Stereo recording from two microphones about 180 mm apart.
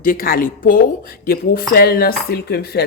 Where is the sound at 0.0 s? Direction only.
50° left (ahead or behind).